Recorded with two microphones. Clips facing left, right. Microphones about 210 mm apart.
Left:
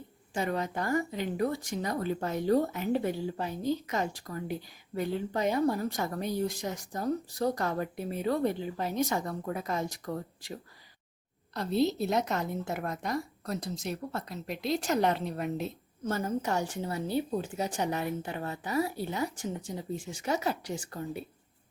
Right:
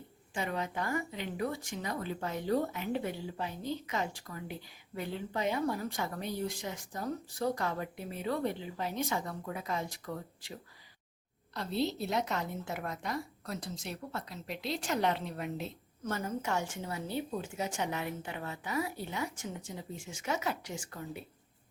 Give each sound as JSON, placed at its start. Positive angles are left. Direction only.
{"t": 0.3, "sound": "speech", "side_deg": 40}
{"t": 11.5, "sound": "a woman's voice", "side_deg": 45}